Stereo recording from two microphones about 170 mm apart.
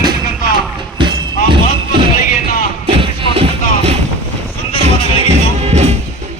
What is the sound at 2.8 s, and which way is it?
Music, 30° right (ahead or behind).